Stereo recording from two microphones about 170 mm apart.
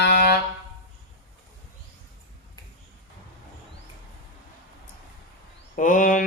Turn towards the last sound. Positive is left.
turn(degrees=50)  # may be behind; listen again after turning